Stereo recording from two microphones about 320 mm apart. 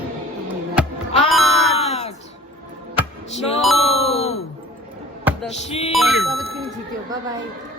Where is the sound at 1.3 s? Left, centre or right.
Centre.